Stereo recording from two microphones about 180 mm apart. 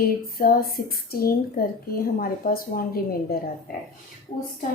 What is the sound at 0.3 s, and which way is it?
Speech, 55° left (ahead or behind).